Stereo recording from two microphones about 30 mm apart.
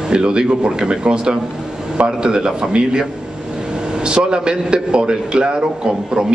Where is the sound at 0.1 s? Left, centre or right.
Right.